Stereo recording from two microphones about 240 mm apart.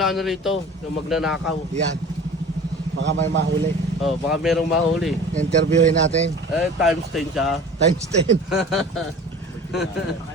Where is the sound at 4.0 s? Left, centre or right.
Centre.